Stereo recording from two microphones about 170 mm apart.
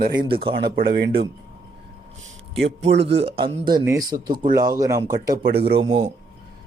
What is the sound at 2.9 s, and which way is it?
Speech, 90° right.